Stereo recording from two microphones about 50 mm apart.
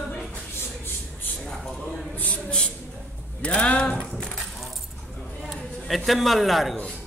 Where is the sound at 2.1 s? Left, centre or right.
Left.